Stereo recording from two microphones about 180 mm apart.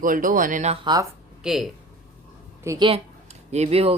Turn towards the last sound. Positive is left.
turn(degrees=-35)  # may be behind; listen again after turning